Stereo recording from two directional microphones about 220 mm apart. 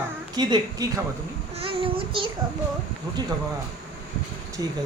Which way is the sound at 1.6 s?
25° right (ahead or behind).